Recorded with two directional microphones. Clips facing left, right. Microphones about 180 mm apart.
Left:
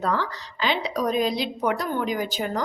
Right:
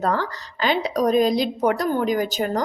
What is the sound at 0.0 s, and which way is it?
A woman's voice, 45° right (ahead or behind).